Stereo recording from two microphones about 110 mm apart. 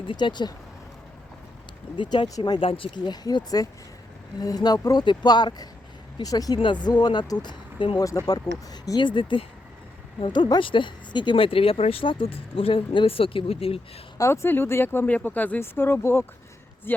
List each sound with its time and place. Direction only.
0.1 s speech: 45° left (ahead or behind)
2.0 s speech: 45° left (ahead or behind)
2.6 s speech: 55° left (ahead or behind); by 6.6 s 35° left (ahead or behind)
6.6 s speech: 45° left (ahead or behind)
8.0 s speech: 35° left (ahead or behind); by 13.8 s 60° left (ahead or behind)
14.2 s speech: 25° left (ahead or behind)